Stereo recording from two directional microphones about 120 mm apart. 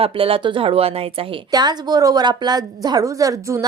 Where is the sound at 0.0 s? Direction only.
50° right (ahead or behind).